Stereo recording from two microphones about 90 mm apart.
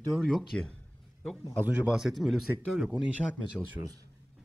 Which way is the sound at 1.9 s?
5° right (ahead or behind).